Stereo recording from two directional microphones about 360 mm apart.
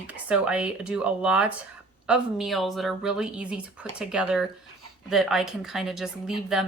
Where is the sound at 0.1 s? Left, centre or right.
Centre.